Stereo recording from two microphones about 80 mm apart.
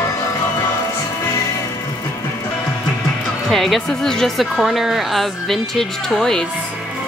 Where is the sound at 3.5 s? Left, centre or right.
Centre.